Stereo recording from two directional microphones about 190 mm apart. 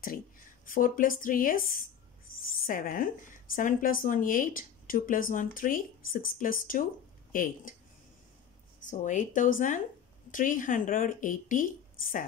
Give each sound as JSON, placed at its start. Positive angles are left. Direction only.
{"t": 0.7, "sound": "a woman's voice", "side_deg": 45}
{"t": 8.8, "sound": "a woman's voice", "side_deg": 40}